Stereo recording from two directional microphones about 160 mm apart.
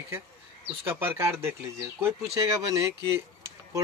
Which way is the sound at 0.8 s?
15° right (ahead or behind).